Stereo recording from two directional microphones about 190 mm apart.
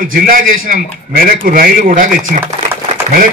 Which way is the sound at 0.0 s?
45° right (ahead or behind).